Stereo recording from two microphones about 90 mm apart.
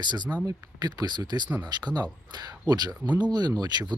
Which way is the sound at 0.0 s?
55° right (ahead or behind).